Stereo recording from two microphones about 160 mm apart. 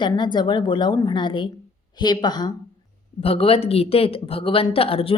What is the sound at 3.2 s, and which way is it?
A woman's voice, 35° left (ahead or behind).